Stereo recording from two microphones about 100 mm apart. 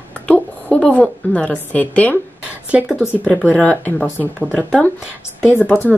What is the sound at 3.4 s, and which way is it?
Speech, 15° left (ahead or behind).